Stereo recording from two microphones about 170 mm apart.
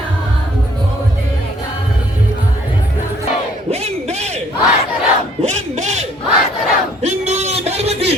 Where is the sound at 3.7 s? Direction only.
40° right (ahead or behind).